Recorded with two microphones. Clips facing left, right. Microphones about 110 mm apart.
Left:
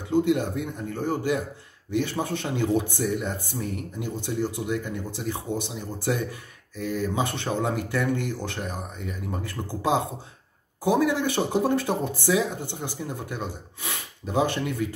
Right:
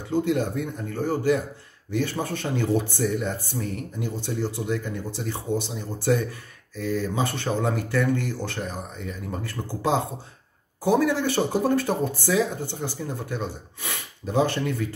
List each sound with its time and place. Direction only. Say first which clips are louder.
0.1 s speech: left 1 dB; 15° left (ahead or behind)